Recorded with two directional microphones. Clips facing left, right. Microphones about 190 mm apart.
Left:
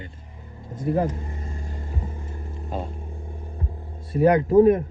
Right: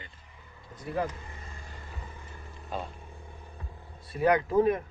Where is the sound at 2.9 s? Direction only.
45° left (ahead or behind).